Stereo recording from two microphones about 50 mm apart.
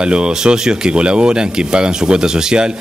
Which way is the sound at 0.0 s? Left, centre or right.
Centre.